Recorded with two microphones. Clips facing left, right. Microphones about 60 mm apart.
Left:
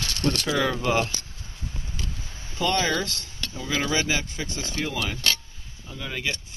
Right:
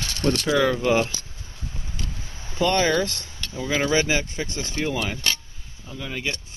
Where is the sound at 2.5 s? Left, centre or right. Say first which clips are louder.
Right 4 dB; right.